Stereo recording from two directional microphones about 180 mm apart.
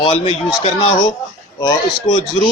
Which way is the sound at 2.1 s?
25° left (ahead or behind).